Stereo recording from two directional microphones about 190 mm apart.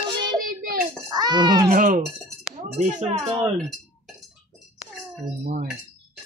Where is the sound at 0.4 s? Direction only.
50° right (ahead or behind).